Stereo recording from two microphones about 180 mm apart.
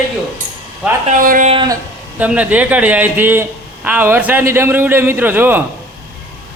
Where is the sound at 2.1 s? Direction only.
10° right (ahead or behind).